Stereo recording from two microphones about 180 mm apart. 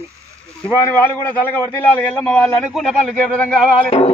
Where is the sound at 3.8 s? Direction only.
35° left (ahead or behind).